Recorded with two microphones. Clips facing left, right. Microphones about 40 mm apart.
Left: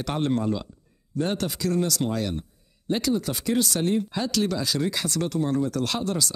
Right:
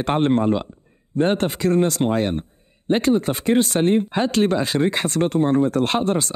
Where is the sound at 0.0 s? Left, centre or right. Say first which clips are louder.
Right 7 dB; right.